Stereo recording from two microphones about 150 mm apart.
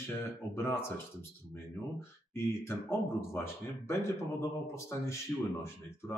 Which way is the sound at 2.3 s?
15° left (ahead or behind).